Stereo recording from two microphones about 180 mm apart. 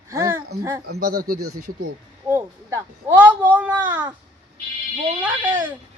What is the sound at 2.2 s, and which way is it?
Speech, 15° right (ahead or behind).